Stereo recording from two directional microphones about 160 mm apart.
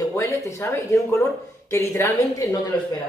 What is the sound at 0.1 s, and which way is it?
A woman's voice, 20° left (ahead or behind).